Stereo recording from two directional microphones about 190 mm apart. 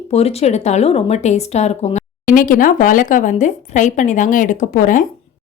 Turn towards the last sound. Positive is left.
turn(degrees=45)  # may be behind; listen again after turning